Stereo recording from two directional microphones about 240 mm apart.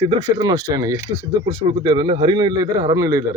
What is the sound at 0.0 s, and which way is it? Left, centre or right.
Speech, centre.